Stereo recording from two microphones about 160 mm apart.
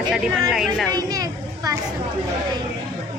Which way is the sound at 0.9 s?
25° right (ahead or behind).